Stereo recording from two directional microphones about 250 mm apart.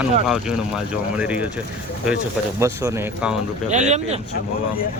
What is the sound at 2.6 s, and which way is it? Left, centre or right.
Speech, centre.